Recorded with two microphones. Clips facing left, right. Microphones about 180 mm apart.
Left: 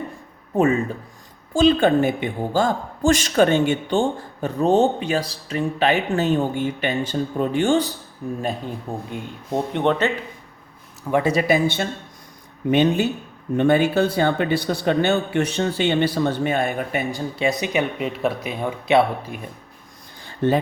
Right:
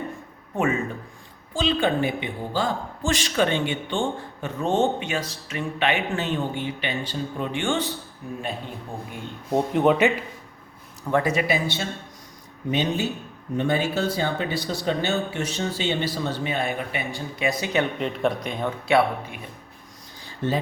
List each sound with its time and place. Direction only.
0.5 s a woman's voice: 35° left (ahead or behind)
1.5 s a woman's voice: 45° left (ahead or behind)
9.5 s speech: centre (ahead or behind)
11.3 s a woman's voice: 35° left (ahead or behind)
11.5 s speech: 55° left (ahead or behind); by 17.5 s 35° left (ahead or behind)
17.6 s speech: 15° left (ahead or behind)
18.9 s speech: 20° left (ahead or behind)
20.2 s a sound: 60° left (ahead or behind)